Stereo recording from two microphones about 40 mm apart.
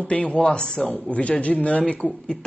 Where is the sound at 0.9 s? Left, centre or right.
Left.